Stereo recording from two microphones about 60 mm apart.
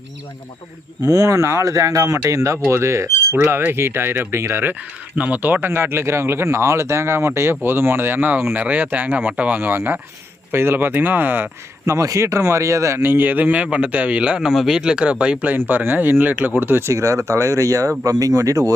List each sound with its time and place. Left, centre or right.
1.0 s speech: right
3.7 s speech: right
4.7 s a man's voice: right
5.6 s a man's voice: right
9.6 s speech: right
11.9 s speech: right
13.0 s a man's voice: right
15.5 s speech: right
16.8 s speech: right